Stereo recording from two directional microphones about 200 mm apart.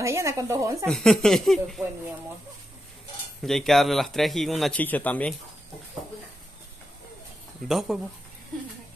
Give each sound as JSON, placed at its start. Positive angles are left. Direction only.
{"t": 0.0, "sound": "speech", "side_deg": -15}
{"t": 0.8, "sound": "speech", "side_deg": 0}
{"t": 3.4, "sound": "speech", "side_deg": 0}
{"t": 7.6, "sound": "speech", "side_deg": 0}